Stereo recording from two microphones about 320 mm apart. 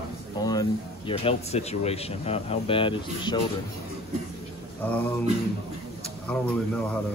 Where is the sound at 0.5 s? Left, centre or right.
Centre.